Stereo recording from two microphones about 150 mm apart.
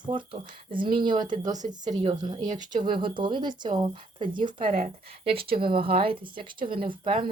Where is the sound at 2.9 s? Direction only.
35° right (ahead or behind).